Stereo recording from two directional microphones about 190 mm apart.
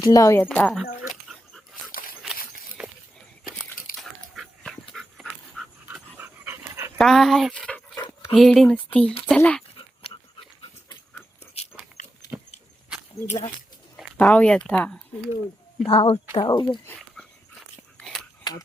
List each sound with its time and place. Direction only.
0.0 s speech: 15° left (ahead or behind)
0.5 s speech: 5° left (ahead or behind)
1.9 s a sound: 50° left (ahead or behind)
2.8 s walk: 5° right (ahead or behind)
3.9 s dog: centre (ahead or behind)
7.0 s dog: centre (ahead or behind)
8.3 s speech: centre (ahead or behind)
11.5 s a sound: 35° left (ahead or behind)
12.3 s dog: 5° right (ahead or behind)
13.9 s speech: 5° left (ahead or behind)
15.8 s speech: 30° left (ahead or behind)
17.2 s dog: centre (ahead or behind)